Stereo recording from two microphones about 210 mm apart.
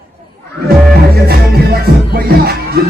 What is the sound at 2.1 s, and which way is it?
Music, 45° right (ahead or behind).